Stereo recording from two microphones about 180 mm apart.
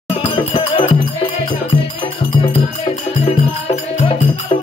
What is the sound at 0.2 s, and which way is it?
Music, 30° left (ahead or behind).